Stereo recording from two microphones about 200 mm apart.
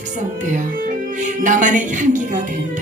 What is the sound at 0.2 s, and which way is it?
Speech, 40° right (ahead or behind).